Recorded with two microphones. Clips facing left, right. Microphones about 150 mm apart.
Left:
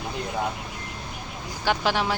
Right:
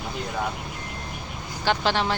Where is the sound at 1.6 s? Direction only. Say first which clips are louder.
Right 1 dB; 5° left (ahead or behind).